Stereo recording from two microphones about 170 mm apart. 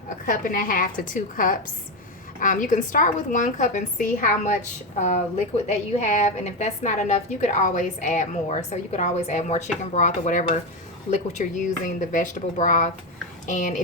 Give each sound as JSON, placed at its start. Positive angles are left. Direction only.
{"t": 0.3, "sound": "a woman's voice", "side_deg": 55}